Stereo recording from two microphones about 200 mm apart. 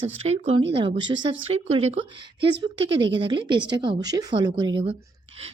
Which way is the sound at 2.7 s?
65° right (ahead or behind).